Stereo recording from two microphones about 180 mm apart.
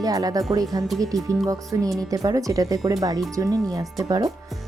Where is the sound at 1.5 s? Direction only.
20° right (ahead or behind).